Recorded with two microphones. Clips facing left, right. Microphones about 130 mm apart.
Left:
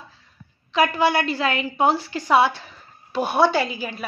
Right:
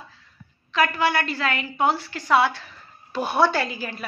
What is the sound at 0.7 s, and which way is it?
A woman's voice, 20° left (ahead or behind).